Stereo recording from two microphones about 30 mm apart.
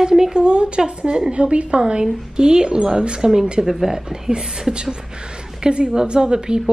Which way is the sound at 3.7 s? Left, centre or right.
Centre.